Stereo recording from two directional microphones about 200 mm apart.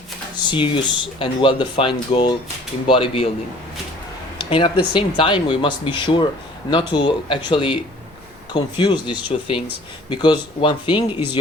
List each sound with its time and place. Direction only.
0.5 s speech: 25° left (ahead or behind)
4.4 s speech: 25° left (ahead or behind)